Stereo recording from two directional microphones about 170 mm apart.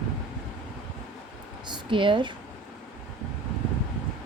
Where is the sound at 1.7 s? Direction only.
30° right (ahead or behind).